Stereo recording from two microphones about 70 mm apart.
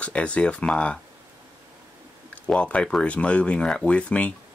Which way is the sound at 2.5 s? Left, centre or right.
Centre.